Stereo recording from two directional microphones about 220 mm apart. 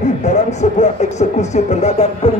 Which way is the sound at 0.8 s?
30° left (ahead or behind).